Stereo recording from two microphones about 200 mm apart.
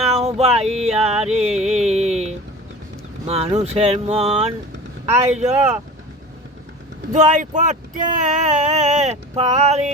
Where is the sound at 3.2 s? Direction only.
30° right (ahead or behind).